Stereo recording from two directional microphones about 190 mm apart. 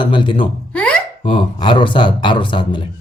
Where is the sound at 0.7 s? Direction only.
5° left (ahead or behind).